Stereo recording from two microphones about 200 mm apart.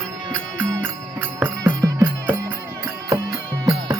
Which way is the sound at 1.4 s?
15° right (ahead or behind).